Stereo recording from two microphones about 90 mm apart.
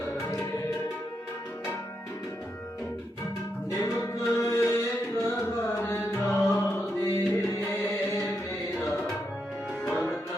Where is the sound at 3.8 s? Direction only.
35° left (ahead or behind).